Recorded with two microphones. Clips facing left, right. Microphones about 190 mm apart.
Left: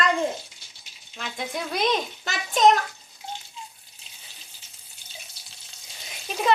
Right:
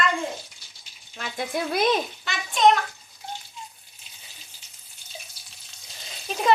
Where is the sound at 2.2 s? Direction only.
40° left (ahead or behind).